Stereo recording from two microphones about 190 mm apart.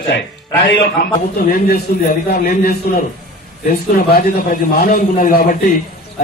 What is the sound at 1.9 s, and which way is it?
Speech, 50° left (ahead or behind).